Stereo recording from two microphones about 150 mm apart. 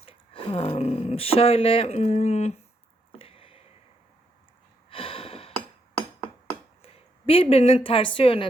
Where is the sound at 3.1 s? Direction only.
40° left (ahead or behind).